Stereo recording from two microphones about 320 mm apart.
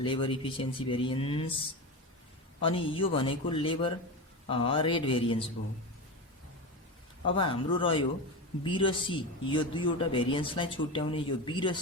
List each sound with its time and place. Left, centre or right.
0.0 s speech: centre
2.6 s speech: centre
7.3 s speech: centre